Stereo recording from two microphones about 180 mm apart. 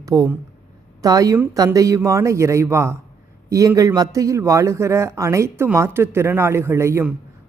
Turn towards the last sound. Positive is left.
turn(degrees=-15)  # may be behind; listen again after turning